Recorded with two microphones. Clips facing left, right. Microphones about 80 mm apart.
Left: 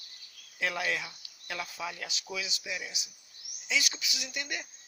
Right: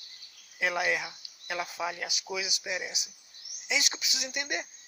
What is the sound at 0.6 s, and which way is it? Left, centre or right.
Speech, centre.